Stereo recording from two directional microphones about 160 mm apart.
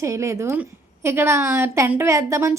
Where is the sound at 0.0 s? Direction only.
20° right (ahead or behind).